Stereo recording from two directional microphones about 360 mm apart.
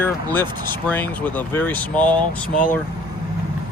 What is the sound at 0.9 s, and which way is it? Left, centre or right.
Speech, centre.